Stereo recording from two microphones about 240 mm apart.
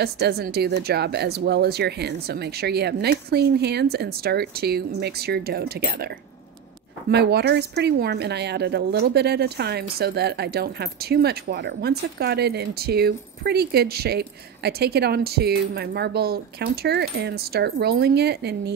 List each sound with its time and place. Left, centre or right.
0.0 s speech: right